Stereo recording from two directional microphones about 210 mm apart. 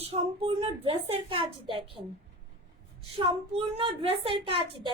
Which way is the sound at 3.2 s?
25° right (ahead or behind).